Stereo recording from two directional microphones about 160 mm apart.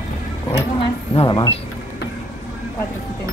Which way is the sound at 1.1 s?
30° left (ahead or behind).